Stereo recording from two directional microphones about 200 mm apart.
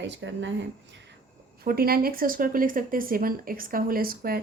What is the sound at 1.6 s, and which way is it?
Speech, 50° right (ahead or behind).